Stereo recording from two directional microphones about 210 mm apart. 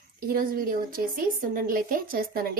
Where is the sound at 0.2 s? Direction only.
45° right (ahead or behind).